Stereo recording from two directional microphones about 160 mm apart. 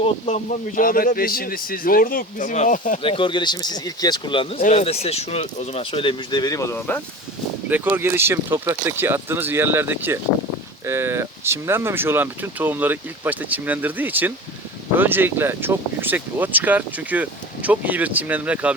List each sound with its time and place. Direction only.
0.0 s speech: 40° left (ahead or behind)
0.8 s speech: 60° left (ahead or behind)
3.0 s speech: 35° left (ahead or behind); by 7.0 s 10° left (ahead or behind)
7.7 s speech: 15° right (ahead or behind)